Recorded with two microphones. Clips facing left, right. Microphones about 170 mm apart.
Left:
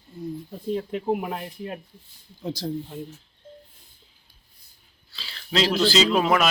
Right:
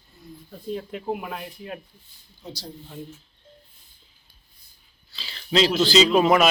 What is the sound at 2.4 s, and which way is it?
Speech, 90° left.